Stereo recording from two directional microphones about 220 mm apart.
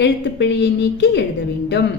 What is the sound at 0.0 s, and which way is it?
A man's voice, 55° left (ahead or behind).